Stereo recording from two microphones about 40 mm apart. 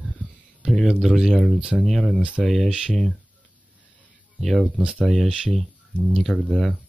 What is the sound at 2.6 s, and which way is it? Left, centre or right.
Speech, right.